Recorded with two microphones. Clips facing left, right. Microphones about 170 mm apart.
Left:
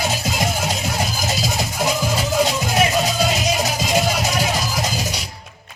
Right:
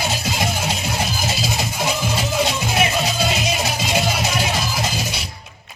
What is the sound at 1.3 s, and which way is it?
Music, 45° left (ahead or behind).